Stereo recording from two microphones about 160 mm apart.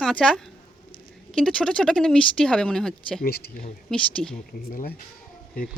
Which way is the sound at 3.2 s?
75° left (ahead or behind).